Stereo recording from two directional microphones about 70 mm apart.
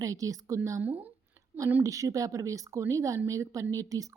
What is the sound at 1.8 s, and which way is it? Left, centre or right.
Speech, right.